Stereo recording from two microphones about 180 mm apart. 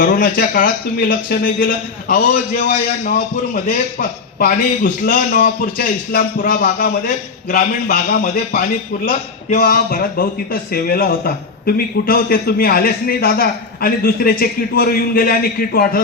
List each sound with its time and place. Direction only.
0.0 s a man's voice: 50° left (ahead or behind)